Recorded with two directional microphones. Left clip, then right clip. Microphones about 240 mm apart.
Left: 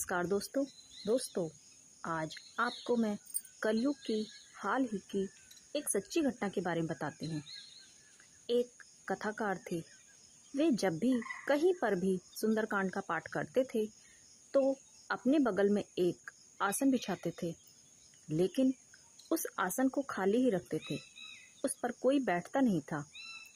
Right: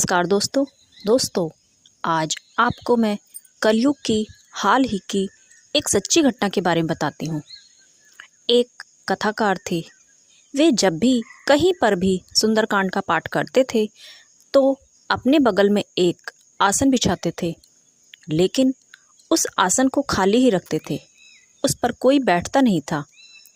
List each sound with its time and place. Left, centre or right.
0.0 s a woman's voice: right